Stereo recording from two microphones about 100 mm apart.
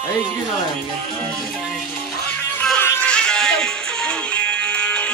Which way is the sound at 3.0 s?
10° left (ahead or behind).